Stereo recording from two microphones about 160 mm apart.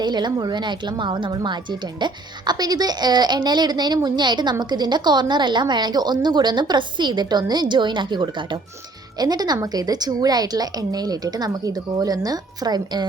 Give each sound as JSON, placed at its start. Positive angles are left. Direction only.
{"t": 0.0, "sound": "a woman's voice", "side_deg": -25}